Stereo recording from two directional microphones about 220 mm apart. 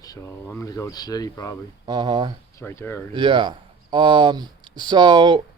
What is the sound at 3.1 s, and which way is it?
Speech, 20° right (ahead or behind).